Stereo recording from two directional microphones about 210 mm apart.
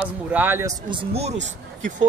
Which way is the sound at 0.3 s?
10° right (ahead or behind).